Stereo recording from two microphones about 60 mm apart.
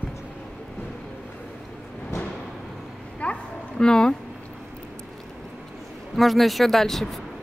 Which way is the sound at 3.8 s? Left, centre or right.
Centre.